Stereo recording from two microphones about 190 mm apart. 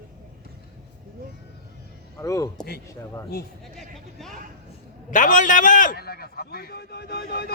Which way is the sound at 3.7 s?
Centre (ahead or behind).